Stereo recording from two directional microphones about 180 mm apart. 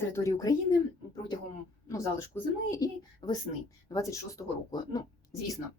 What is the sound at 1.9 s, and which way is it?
Speech, 15° left (ahead or behind).